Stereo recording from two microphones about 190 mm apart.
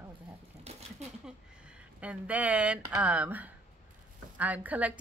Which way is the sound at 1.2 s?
5° right (ahead or behind).